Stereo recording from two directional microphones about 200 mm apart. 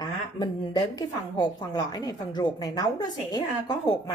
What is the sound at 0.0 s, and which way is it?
A woman's voice, 20° left (ahead or behind).